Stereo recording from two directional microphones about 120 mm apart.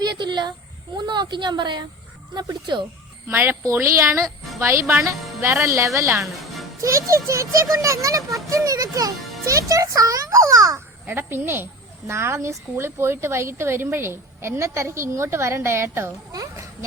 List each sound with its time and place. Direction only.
0.0 s speech: 40° right (ahead or behind)
3.2 s a woman's voice: 20° right (ahead or behind)
6.4 s music: centre (ahead or behind)
6.8 s a woman's voice: 25° right (ahead or behind)